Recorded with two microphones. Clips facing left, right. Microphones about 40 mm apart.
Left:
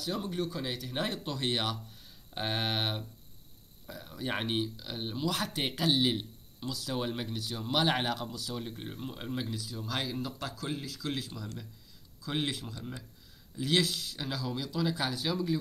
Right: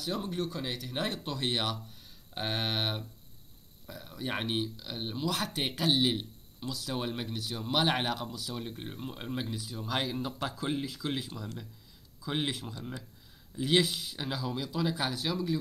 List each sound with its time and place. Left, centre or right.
0.0 s speech: centre
10.4 s speech: right; by 15.5 s centre